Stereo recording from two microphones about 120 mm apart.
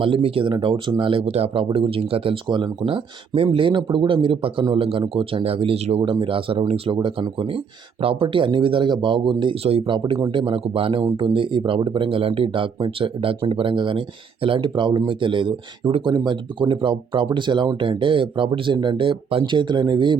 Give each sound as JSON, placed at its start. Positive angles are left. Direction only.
{"t": 0.0, "sound": "speech", "side_deg": -50}
{"t": 6.0, "sound": "speech", "side_deg": -45}
{"t": 10.0, "sound": "speech", "side_deg": -30}
{"t": 10.3, "sound": "speech", "side_deg": -50}